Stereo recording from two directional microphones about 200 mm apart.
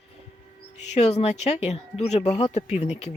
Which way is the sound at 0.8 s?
35° left (ahead or behind).